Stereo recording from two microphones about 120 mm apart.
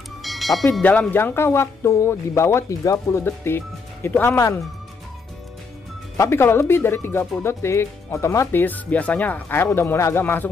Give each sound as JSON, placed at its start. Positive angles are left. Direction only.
{"t": 0.2, "sound": "music", "side_deg": 0}
{"t": 0.8, "sound": "speech", "side_deg": 15}
{"t": 6.1, "sound": "speech", "side_deg": 20}